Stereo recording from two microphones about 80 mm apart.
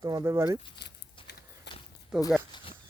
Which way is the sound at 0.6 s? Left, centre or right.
Left.